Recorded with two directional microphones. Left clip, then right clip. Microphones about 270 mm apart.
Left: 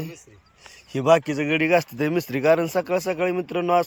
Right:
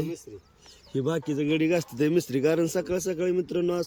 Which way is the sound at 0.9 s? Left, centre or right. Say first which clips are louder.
Left 10 dB; left.